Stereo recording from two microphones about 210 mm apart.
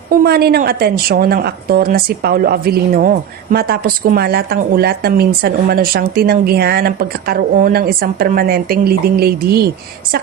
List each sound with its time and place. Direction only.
0.1 s speech: 50° right (ahead or behind)